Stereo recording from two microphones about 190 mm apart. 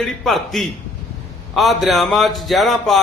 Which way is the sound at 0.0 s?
Centre (ahead or behind).